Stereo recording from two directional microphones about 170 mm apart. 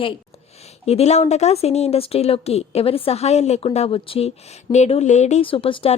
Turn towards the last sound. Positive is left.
turn(degrees=30)  # may be behind; listen again after turning